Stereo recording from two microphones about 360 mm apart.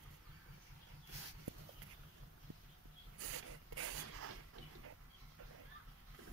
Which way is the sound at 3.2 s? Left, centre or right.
Right.